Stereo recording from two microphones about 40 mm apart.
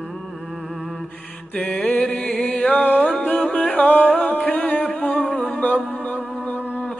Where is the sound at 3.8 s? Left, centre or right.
Left.